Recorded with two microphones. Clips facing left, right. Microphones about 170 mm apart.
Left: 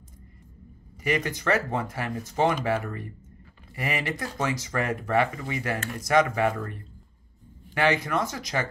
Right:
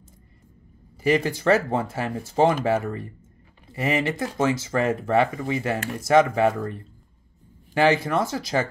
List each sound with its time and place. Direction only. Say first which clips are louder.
1.0 s speech: right 6 dB; 30° right (ahead or behind)